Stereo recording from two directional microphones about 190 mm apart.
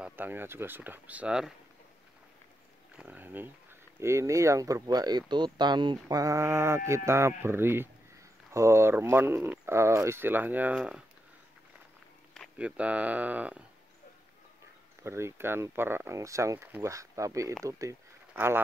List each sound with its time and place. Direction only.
0.0 s speech: 10° right (ahead or behind)
3.0 s speech: 10° right (ahead or behind)
12.4 s speech: 5° right (ahead or behind)
15.0 s speech: 15° right (ahead or behind)